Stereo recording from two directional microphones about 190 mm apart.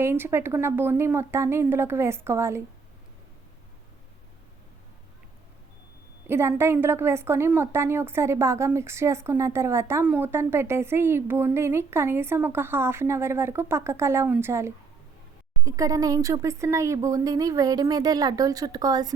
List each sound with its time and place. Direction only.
0.0 s a woman's voice: 10° right (ahead or behind)
6.2 s a woman's voice: 15° right (ahead or behind)